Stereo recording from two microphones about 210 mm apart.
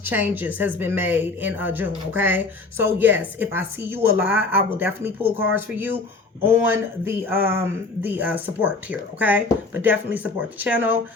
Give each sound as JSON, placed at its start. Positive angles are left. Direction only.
{"t": 0.0, "sound": "speech", "side_deg": -10}